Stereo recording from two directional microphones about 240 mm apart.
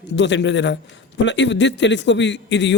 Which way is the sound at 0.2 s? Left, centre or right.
Left.